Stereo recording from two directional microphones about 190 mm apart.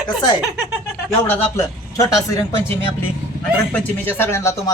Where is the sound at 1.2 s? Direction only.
10° left (ahead or behind).